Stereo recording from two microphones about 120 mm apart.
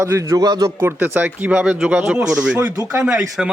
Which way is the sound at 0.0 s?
25° right (ahead or behind).